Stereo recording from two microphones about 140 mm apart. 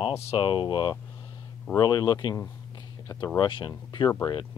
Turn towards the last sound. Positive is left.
turn(degrees=30)  # may be behind; listen again after turning